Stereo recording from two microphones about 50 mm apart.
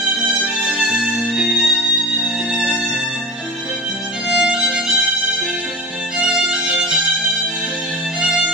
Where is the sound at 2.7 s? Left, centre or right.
Centre.